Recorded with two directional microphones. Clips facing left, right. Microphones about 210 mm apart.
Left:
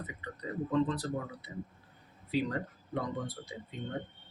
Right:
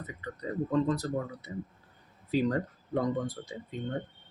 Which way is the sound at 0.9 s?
45° right (ahead or behind).